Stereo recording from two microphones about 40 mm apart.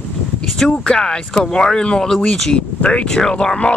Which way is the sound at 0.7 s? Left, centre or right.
Centre.